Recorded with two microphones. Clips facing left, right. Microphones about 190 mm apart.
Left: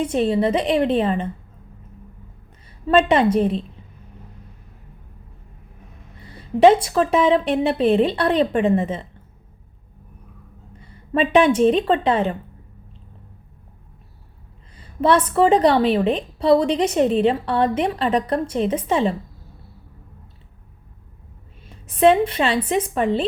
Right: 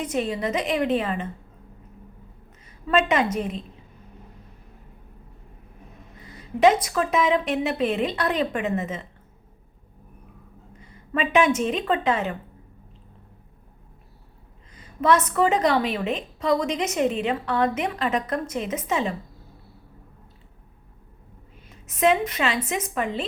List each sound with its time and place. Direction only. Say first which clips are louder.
0.0 s a woman's voice: left 7 dB; 30° left (ahead or behind)
2.8 s a woman's voice: left 6 dB; 30° left (ahead or behind)
6.2 s a woman's voice: left 5 dB; 30° left (ahead or behind)
10.8 s a woman's voice: left 6 dB; 30° left (ahead or behind)
14.8 s a woman's voice: left 3 dB; 30° left (ahead or behind)
21.8 s a woman's voice: left 6 dB; 30° left (ahead or behind)